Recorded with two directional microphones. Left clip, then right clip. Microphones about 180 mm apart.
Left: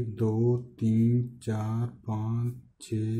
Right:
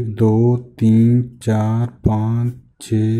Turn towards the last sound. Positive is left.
turn(degrees=-35)  # may be behind; listen again after turning